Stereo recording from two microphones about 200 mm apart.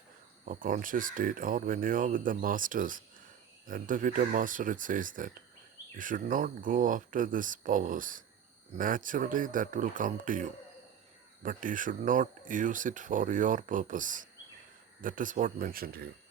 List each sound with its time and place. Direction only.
0.4 s speech: 40° right (ahead or behind)